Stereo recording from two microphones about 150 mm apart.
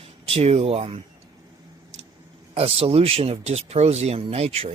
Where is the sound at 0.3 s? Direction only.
40° right (ahead or behind).